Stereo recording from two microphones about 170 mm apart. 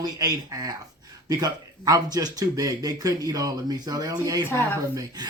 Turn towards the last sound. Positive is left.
turn(degrees=-25)  # may be behind; listen again after turning